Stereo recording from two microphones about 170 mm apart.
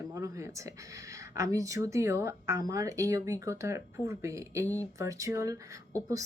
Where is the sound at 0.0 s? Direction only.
20° right (ahead or behind).